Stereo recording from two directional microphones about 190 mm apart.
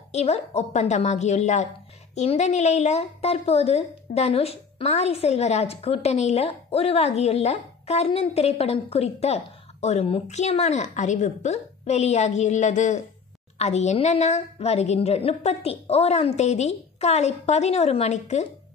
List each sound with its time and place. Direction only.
0.1 s a woman's voice: 35° left (ahead or behind)